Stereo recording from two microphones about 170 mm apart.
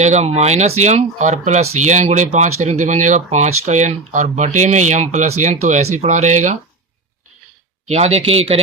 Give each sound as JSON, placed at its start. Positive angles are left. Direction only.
{"t": 0.0, "sound": "speech", "side_deg": -40}
{"t": 7.9, "sound": "speech", "side_deg": -40}